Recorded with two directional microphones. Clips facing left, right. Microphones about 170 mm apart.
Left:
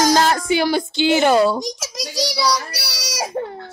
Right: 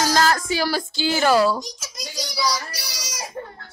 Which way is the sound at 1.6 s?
80° left.